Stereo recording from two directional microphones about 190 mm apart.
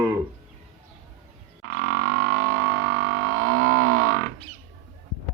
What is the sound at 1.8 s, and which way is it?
Music, 90° right.